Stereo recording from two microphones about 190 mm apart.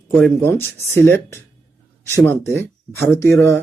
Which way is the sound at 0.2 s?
10° left (ahead or behind).